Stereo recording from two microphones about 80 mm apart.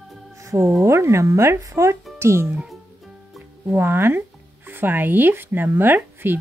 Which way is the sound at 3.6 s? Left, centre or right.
Right.